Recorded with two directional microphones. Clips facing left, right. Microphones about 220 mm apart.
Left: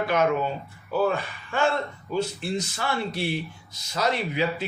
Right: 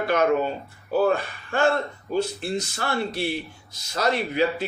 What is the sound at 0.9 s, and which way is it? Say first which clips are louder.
Speech: right 3 dB; 40° right (ahead or behind).